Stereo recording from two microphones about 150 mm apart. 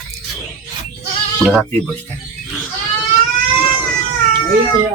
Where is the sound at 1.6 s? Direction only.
10° left (ahead or behind).